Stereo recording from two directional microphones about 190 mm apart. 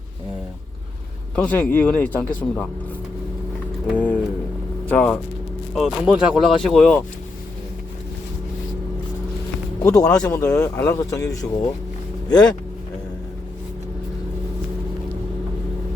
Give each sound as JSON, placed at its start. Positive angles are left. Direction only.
{"t": 1.4, "sound": "speech", "side_deg": 5}
{"t": 3.9, "sound": "a sound", "side_deg": 5}
{"t": 4.9, "sound": "speech", "side_deg": 5}
{"t": 10.0, "sound": "speech", "side_deg": 20}